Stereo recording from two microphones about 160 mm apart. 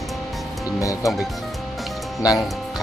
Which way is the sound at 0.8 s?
20° left (ahead or behind).